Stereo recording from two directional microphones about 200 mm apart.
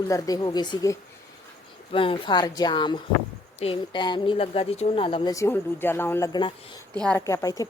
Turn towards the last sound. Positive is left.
turn(degrees=15)  # may be behind; listen again after turning